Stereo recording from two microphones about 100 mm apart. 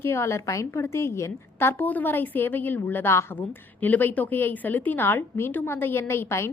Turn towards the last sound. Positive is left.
turn(degrees=25)  # may be behind; listen again after turning